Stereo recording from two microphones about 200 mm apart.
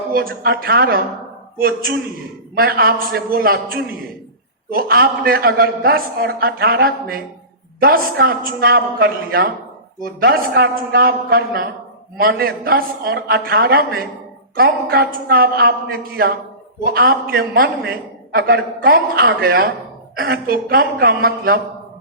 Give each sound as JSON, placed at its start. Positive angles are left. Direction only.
{"t": 0.1, "sound": "a man's voice", "side_deg": -50}